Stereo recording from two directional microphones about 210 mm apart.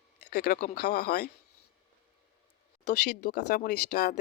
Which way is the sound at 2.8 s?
50° left (ahead or behind).